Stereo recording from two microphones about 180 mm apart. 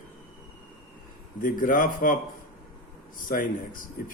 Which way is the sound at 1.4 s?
50° left (ahead or behind).